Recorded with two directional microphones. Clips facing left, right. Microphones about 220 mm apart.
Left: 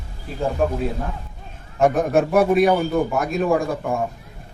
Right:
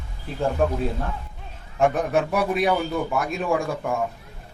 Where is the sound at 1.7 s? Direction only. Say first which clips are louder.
Left 4 dB; 40° left (ahead or behind).